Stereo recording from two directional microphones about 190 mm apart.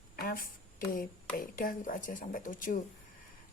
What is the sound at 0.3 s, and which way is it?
A woman's voice, 50° left (ahead or behind).